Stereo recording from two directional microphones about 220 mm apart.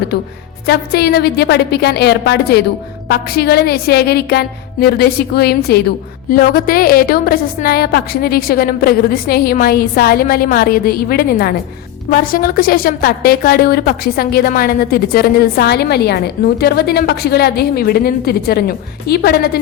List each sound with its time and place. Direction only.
0.7 s a woman's voice: 45° left (ahead or behind)